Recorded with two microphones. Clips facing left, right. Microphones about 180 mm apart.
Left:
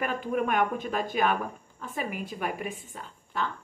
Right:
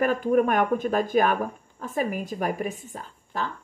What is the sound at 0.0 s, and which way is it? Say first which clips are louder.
Speech: right 7 dB; 45° right (ahead or behind).